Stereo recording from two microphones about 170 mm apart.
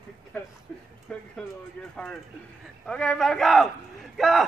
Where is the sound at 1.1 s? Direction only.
5° left (ahead or behind).